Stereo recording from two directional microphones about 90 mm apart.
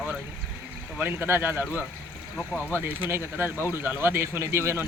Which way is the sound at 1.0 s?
25° right (ahead or behind).